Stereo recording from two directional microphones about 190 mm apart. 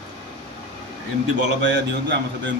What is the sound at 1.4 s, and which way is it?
Speech, 70° right (ahead or behind).